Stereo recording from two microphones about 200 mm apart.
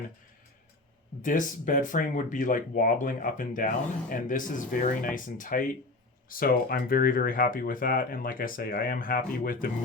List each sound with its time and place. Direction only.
1.2 s speech: 40° left (ahead or behind)